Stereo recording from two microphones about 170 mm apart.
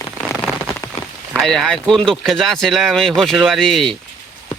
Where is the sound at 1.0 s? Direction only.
40° left (ahead or behind).